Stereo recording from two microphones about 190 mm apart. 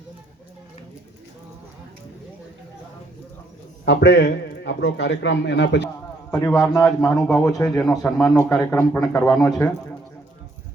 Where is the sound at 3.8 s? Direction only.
65° left (ahead or behind).